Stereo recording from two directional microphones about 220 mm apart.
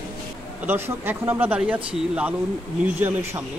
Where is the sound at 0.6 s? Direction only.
10° right (ahead or behind).